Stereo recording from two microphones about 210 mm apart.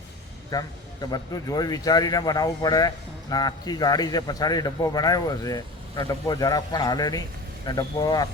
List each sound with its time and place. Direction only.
0.5 s speech: 15° left (ahead or behind)